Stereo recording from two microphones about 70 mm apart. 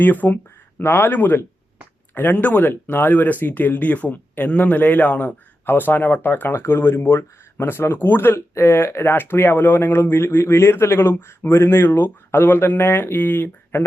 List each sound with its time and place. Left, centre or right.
0.0 s speech: left